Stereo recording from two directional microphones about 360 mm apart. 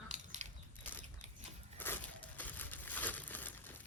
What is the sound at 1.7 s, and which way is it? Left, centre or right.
Crumpling, centre.